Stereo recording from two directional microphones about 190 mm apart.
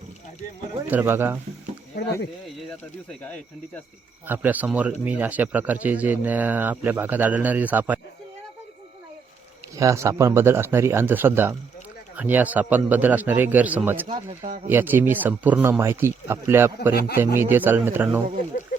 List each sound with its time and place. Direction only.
0.9 s speech: 10° right (ahead or behind)
4.3 s speech: 10° right (ahead or behind)
9.7 s speech: 15° right (ahead or behind)
14.1 s speech: 35° right (ahead or behind)
14.7 s speech: 10° right (ahead or behind)